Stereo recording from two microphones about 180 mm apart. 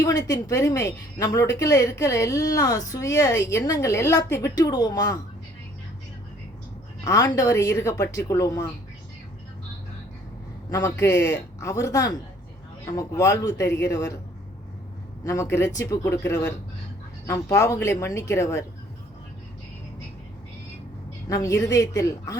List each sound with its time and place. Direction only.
0.0 s speech: 20° left (ahead or behind)
7.0 s speech: 20° left (ahead or behind)
10.7 s speech: 20° left (ahead or behind)
15.2 s speech: 15° left (ahead or behind)
21.2 s a woman's voice: 20° left (ahead or behind)